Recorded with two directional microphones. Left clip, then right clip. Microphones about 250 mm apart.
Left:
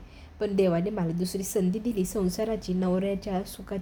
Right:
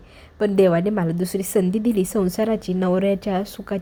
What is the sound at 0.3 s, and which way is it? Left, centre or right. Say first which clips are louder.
A woman's voice: right 8 dB; right.